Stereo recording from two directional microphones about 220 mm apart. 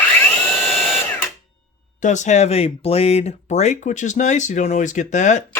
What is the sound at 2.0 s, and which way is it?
Speech, 35° left (ahead or behind).